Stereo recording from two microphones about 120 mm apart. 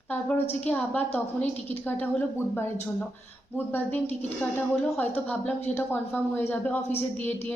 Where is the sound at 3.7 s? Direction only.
15° left (ahead or behind).